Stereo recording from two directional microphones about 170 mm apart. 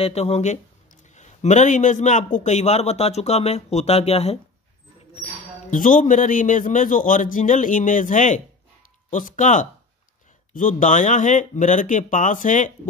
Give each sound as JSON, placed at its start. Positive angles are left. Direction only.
{"t": 0.0, "sound": "a man's voice", "side_deg": 40}
{"t": 5.7, "sound": "a man's voice", "side_deg": 50}